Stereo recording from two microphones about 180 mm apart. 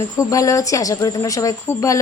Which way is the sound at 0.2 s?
20° left (ahead or behind).